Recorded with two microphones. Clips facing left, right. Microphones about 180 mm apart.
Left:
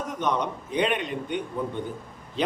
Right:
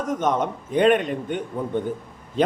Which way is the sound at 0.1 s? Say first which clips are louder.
Right 5 dB; 45° right (ahead or behind).